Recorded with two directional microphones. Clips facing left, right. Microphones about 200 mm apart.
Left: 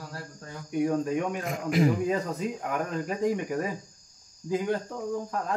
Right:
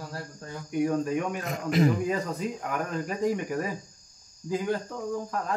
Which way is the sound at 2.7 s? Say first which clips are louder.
Left 1 dB; 20° left (ahead or behind).